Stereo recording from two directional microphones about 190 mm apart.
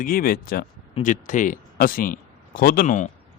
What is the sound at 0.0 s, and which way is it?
Speech, 50° left (ahead or behind).